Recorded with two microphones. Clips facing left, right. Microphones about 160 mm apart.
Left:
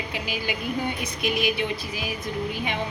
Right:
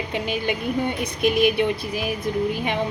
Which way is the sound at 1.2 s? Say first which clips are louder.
Right 7 dB; 55° right (ahead or behind).